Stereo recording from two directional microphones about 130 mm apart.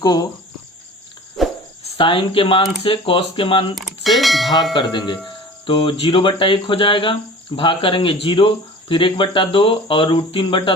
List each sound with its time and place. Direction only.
0.0 s cricket: 30° left (ahead or behind)
1.4 s cricket: centre (ahead or behind)
2.0 s speech: 40° left (ahead or behind)
3.8 s bell: centre (ahead or behind)
4.7 s speech: 35° left (ahead or behind)